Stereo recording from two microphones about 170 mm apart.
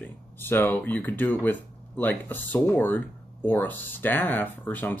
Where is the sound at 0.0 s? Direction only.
10° left (ahead or behind).